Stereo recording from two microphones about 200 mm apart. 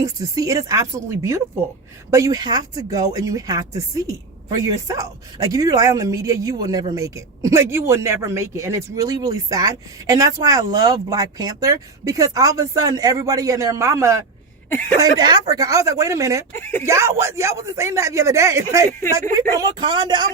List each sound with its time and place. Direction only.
0.0 s speech: 15° right (ahead or behind)
16.5 s speech: 10° left (ahead or behind)
16.8 s speech: 15° right (ahead or behind)